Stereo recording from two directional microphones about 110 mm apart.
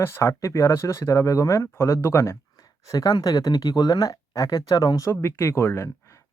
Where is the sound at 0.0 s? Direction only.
25° left (ahead or behind).